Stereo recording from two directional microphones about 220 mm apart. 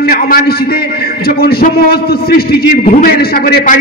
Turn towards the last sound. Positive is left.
turn(degrees=40)  # may be behind; listen again after turning